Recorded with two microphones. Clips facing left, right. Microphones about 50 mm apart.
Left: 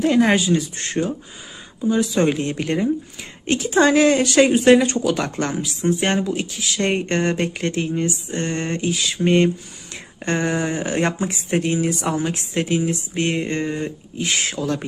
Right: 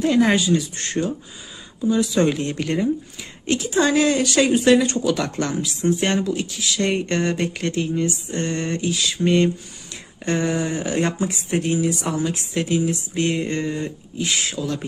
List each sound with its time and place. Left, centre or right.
0.0 s speech: left